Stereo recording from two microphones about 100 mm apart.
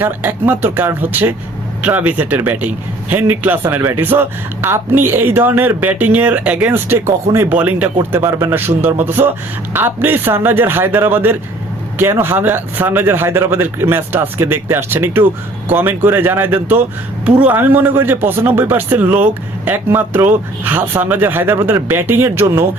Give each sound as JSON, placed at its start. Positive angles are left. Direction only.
{"t": 0.0, "sound": "speech", "side_deg": -20}
{"t": 7.5, "sound": "speech", "side_deg": -15}
{"t": 8.1, "sound": "speech", "side_deg": -25}